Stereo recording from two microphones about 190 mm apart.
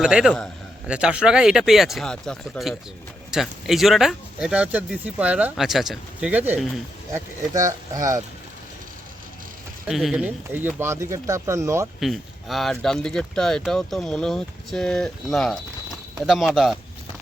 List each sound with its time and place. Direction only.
0.0 s speech: 5° right (ahead or behind)
9.8 s speech: centre (ahead or behind)
11.9 s speech: centre (ahead or behind)